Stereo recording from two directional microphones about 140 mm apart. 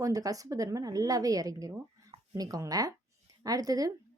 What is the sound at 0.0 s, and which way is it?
A woman's voice, 25° right (ahead or behind).